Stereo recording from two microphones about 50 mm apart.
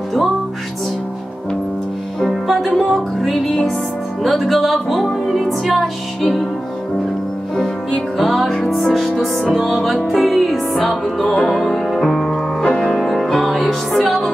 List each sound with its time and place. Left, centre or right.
2.4 s music: centre
7.5 s music: centre
12.6 s music: centre
12.9 s music: centre